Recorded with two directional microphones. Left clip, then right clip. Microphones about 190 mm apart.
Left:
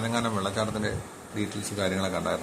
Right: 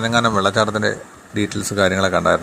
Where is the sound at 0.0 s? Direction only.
40° right (ahead or behind).